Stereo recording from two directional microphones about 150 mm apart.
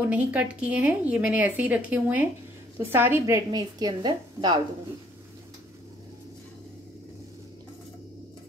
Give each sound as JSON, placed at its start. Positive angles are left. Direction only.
{"t": 0.0, "sound": "a woman's voice", "side_deg": -10}
{"t": 3.5, "sound": "a woman's voice", "side_deg": -30}